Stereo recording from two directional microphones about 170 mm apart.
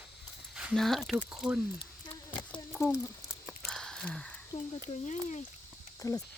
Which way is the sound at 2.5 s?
10° left (ahead or behind).